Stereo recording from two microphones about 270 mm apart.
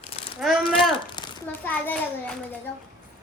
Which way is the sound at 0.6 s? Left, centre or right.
Centre.